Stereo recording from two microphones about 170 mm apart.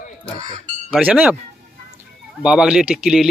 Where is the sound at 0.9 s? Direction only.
5° right (ahead or behind).